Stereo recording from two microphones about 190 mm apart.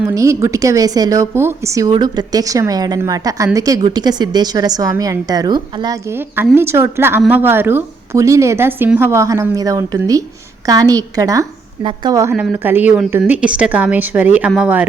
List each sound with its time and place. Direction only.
0.1 s a woman's voice: 15° right (ahead or behind)
12.3 s speech: 10° right (ahead or behind)